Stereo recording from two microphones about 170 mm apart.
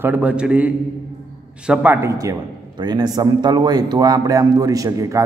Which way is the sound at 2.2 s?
25° right (ahead or behind).